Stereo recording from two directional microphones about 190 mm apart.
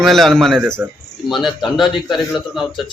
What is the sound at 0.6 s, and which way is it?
Speech, 10° right (ahead or behind).